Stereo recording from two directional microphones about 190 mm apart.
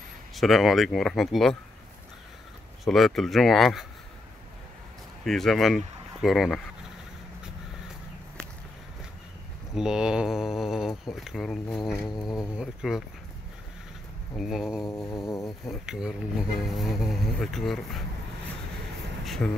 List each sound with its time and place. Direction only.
0.3 s speech: centre (ahead or behind)
2.8 s speech: centre (ahead or behind)
5.2 s speech: centre (ahead or behind)
9.8 s speech: 5° right (ahead or behind)
14.3 s speech: centre (ahead or behind)
14.9 s music: 15° left (ahead or behind)
15.6 s speech: centre (ahead or behind)
19.2 s vehicle: centre (ahead or behind)